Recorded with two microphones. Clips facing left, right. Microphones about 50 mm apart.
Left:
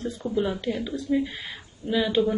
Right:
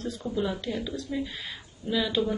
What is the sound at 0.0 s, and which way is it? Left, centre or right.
Speech, centre.